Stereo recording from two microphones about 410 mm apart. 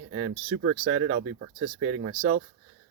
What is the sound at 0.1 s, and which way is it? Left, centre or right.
Speech, right.